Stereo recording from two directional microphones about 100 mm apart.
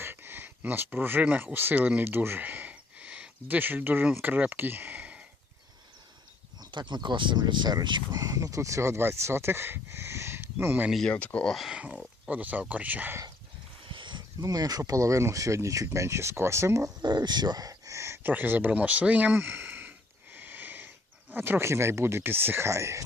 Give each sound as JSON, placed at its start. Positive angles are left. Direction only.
{"t": 0.0, "sound": "speech", "side_deg": -20}
{"t": 6.6, "sound": "speech", "side_deg": -50}
{"t": 11.1, "sound": "speech", "side_deg": 15}
{"t": 11.5, "sound": "speech", "side_deg": -5}
{"t": 13.8, "sound": "a sound", "side_deg": -55}
{"t": 14.4, "sound": "speech", "side_deg": -40}
{"t": 17.0, "sound": "speech", "side_deg": -45}